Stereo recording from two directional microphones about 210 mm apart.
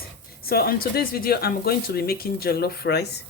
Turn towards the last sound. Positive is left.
turn(degrees=50)  # may be behind; listen again after turning